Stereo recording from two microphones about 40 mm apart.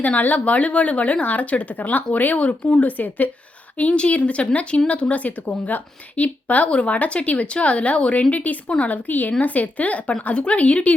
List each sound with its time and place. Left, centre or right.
0.2 s a woman's voice: left
3.8 s a woman's voice: left